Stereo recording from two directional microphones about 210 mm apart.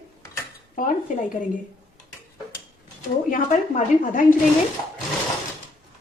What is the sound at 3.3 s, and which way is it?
A woman's voice, 40° left (ahead or behind).